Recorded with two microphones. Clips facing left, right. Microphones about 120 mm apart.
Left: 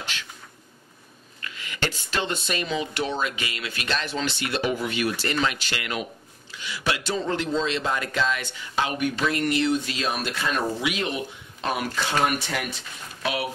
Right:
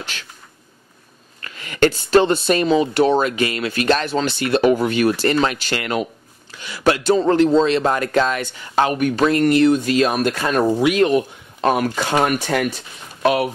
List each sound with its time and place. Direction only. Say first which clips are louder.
1.4 s speech: right 13 dB; 45° right (ahead or behind)